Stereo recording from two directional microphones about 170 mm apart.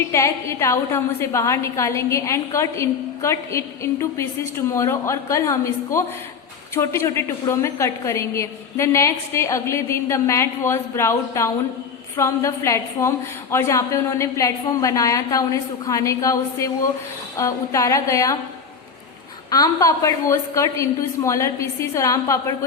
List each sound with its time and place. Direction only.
0.1 s a woman's voice: 15° left (ahead or behind)
19.5 s a woman's voice: 20° left (ahead or behind)